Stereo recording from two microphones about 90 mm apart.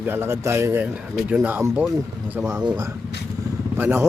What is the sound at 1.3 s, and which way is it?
Speech, 15° right (ahead or behind).